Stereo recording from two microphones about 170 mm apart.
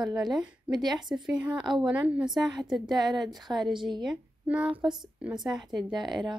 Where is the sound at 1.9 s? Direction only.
5° right (ahead or behind).